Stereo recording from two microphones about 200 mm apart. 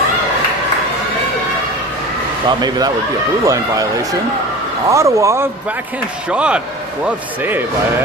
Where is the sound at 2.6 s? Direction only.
20° right (ahead or behind).